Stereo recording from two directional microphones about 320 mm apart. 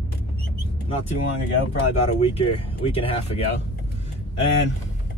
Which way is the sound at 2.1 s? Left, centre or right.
Centre.